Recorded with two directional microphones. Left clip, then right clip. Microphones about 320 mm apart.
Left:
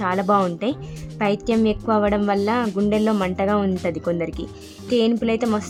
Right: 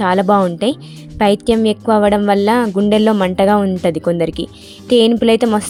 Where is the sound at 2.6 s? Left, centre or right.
Centre.